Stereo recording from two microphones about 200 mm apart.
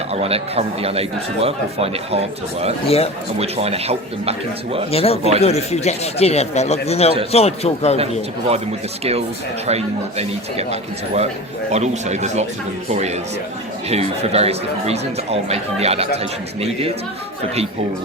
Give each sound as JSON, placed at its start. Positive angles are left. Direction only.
{"t": 0.1, "sound": "speech", "side_deg": -30}
{"t": 2.8, "sound": "speech", "side_deg": 30}
{"t": 3.3, "sound": "speech", "side_deg": -30}
{"t": 4.9, "sound": "speech", "side_deg": 30}
{"t": 9.6, "sound": "speech", "side_deg": -30}